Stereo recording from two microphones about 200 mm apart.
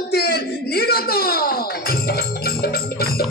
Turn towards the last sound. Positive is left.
turn(degrees=50)  # may be behind; listen again after turning